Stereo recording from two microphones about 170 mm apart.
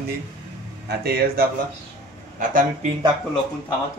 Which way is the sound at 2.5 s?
55° right (ahead or behind).